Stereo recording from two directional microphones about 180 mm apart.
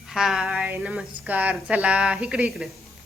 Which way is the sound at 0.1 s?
5° right (ahead or behind).